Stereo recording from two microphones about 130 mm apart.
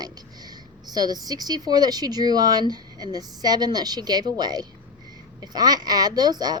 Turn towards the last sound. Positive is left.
turn(degrees=-30)  # may be behind; listen again after turning